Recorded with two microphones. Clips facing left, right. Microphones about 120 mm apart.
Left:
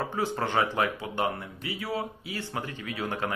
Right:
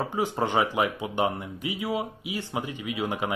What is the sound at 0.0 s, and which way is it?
Speech, 15° right (ahead or behind).